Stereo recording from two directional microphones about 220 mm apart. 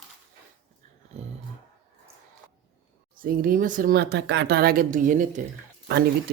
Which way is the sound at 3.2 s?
40° right (ahead or behind).